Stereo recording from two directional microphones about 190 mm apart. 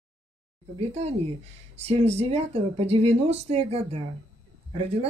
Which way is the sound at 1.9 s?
35° right (ahead or behind).